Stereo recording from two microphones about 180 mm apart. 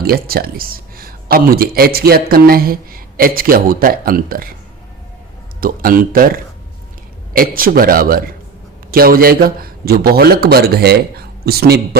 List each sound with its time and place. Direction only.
0.0 s speech: 55° right (ahead or behind)
5.5 s a man's voice: 55° right (ahead or behind)